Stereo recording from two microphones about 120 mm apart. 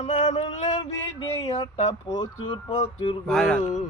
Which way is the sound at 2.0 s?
30° left (ahead or behind).